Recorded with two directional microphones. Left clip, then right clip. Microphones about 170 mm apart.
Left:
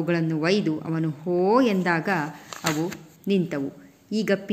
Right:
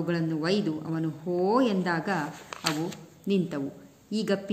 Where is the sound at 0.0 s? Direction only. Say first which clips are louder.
Left 5 dB; 25° left (ahead or behind).